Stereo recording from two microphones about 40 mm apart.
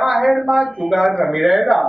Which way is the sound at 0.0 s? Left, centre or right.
Centre.